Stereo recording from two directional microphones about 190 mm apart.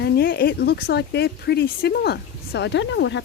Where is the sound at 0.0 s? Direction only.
55° left (ahead or behind).